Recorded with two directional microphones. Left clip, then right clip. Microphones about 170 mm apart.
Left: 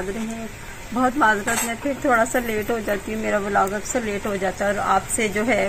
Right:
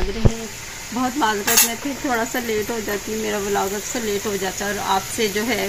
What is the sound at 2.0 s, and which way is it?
Speech, 25° left (ahead or behind).